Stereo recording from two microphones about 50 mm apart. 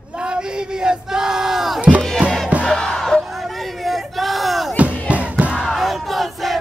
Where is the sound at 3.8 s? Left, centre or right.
Centre.